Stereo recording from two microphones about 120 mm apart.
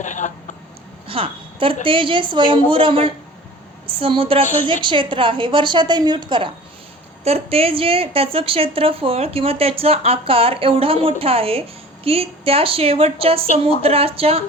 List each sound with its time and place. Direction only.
0.0 s speech: 90° left
1.0 s a woman's voice: 50° right (ahead or behind)
7.3 s a woman's voice: 55° right (ahead or behind)